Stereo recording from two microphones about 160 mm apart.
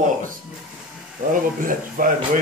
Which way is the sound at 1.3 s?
60° right (ahead or behind).